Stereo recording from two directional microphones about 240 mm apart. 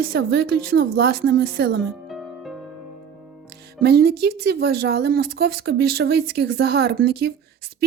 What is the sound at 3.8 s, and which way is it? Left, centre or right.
A woman's voice, right.